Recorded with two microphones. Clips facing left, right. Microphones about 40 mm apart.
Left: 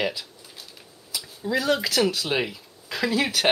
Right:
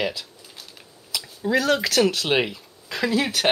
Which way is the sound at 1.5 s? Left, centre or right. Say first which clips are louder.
Right 3 dB; right.